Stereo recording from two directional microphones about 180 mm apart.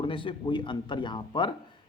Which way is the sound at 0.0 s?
30° left (ahead or behind).